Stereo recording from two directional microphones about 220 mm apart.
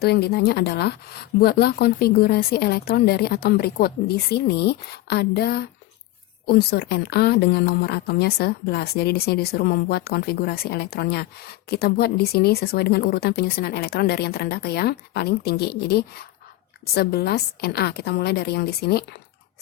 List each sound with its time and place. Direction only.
0.0 s speech: 45° left (ahead or behind)